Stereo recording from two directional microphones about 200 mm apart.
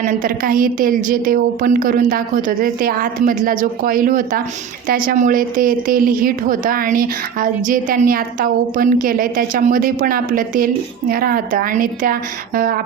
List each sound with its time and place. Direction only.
0.0 s a woman's voice: 40° right (ahead or behind)